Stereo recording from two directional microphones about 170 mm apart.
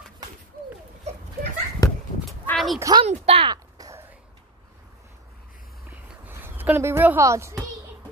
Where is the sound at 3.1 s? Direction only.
35° right (ahead or behind).